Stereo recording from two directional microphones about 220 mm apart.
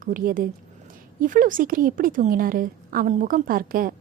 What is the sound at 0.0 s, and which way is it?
A woman's voice, 40° right (ahead or behind).